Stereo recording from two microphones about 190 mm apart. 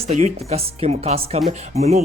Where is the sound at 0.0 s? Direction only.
35° right (ahead or behind).